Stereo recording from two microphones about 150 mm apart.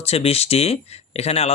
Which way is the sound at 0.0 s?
45° left (ahead or behind).